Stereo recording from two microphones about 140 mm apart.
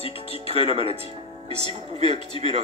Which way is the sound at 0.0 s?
45° left (ahead or behind).